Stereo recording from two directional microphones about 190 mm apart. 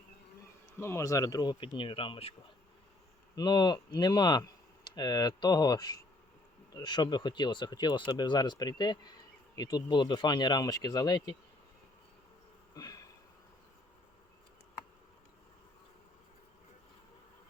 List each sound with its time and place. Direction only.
0.8 s speech: 15° left (ahead or behind)
3.3 s speech: 20° left (ahead or behind)
12.7 s bee: 20° left (ahead or behind)